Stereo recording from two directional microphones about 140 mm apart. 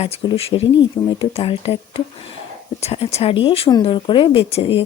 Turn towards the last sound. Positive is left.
turn(degrees=40)  # may be behind; listen again after turning